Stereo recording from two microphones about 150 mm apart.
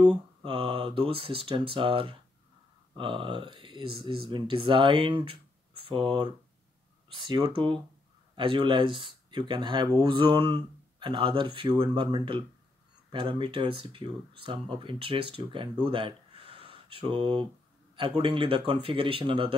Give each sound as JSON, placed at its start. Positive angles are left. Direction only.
{"t": 0.0, "sound": "speech", "side_deg": -30}